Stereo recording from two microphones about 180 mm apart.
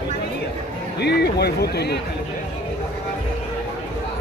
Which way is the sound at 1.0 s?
65° left (ahead or behind).